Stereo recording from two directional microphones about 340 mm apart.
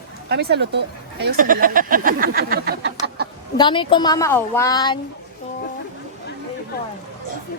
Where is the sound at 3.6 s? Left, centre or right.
Centre.